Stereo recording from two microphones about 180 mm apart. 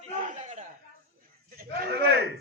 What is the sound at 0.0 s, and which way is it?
Chuckle, 40° right (ahead or behind).